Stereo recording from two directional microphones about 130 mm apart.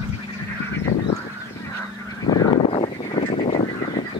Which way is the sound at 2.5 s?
40° left (ahead or behind).